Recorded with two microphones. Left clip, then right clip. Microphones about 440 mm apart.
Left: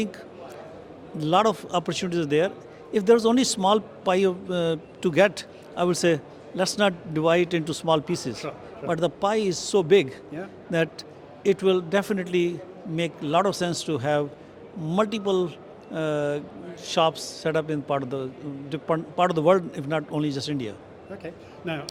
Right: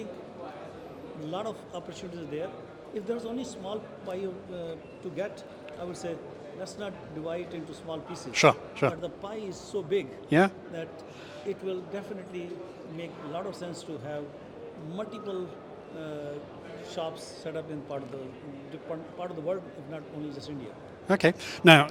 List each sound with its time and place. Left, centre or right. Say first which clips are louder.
1.3 s a man's voice: left 15 dB; left
8.4 s a man's voice: right 12 dB; right
9.0 s a man's voice: left 13 dB; left
11.4 s a man's voice: left 13 dB; left
21.1 s speech: right 14 dB; right